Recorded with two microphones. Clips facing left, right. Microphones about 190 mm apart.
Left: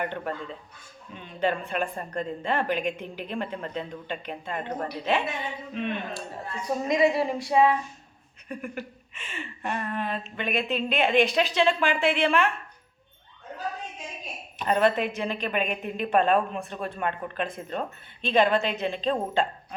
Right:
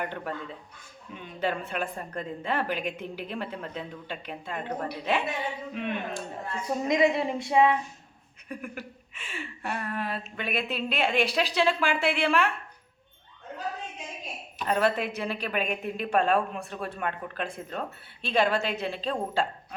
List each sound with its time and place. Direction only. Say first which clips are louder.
0.0 s a woman's voice: left 2 dB; 5° right (ahead or behind)
8.4 s a woman's voice: left 3 dB; 5° right (ahead or behind)
14.6 s a woman's voice: left 3 dB; centre (ahead or behind)